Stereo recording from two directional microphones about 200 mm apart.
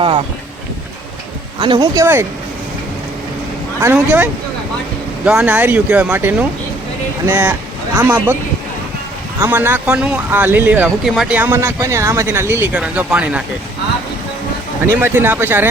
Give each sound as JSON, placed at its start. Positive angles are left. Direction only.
{"t": 1.5, "sound": "speech", "side_deg": -20}
{"t": 3.8, "sound": "speech", "side_deg": -10}
{"t": 9.4, "sound": "speech", "side_deg": -10}
{"t": 14.9, "sound": "speech", "side_deg": -10}